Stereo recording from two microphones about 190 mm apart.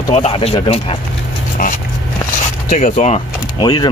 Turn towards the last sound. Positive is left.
turn(degrees=20)  # may be behind; listen again after turning